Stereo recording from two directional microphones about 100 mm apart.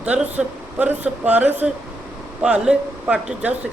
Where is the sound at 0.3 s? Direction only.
15° right (ahead or behind).